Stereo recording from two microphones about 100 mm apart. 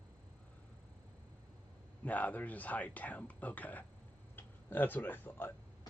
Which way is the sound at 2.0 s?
15° left (ahead or behind).